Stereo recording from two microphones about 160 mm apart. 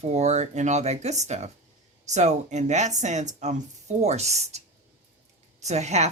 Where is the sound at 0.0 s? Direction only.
45° right (ahead or behind).